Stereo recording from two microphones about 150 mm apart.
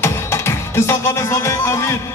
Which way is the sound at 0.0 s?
15° left (ahead or behind).